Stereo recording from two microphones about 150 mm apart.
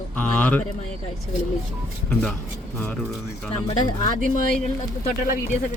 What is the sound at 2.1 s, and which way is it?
Speech, 10° left (ahead or behind).